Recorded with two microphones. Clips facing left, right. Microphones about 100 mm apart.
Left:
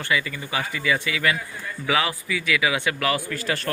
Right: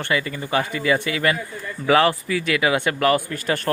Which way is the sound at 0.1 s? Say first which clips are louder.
Right 3 dB; 40° right (ahead or behind).